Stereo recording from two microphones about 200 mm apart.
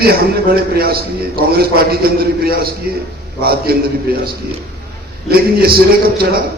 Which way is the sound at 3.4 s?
50° right (ahead or behind).